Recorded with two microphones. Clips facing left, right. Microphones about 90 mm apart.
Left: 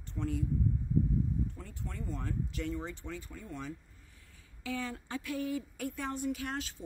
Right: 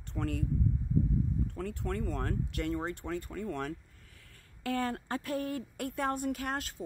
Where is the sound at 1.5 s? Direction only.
70° right (ahead or behind).